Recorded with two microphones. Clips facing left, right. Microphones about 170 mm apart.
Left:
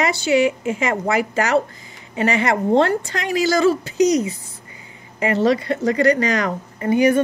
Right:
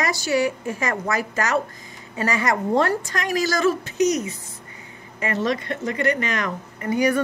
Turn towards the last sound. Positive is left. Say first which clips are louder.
# left 5 dB
turn(degrees=25)  # may be behind; listen again after turning